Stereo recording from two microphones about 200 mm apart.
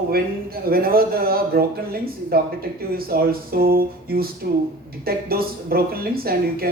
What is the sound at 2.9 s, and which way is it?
Speech, 50° right (ahead or behind).